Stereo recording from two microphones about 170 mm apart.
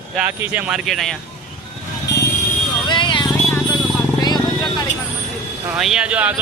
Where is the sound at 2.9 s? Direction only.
30° left (ahead or behind).